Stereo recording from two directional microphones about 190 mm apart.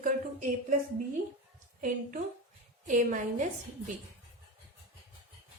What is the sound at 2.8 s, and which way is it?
Speech, 40° right (ahead or behind).